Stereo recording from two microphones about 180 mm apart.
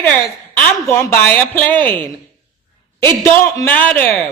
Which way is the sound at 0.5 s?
15° left (ahead or behind).